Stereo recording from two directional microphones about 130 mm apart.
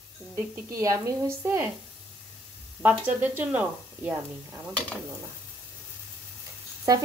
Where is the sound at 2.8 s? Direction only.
15° right (ahead or behind).